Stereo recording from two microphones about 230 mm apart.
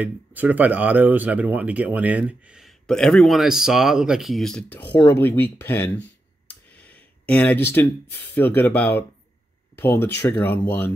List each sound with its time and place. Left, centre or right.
0.0 s speech: centre